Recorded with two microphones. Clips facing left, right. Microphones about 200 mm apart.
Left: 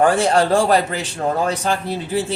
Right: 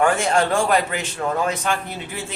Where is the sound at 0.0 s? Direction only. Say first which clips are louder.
Left 3 dB; 35° left (ahead or behind).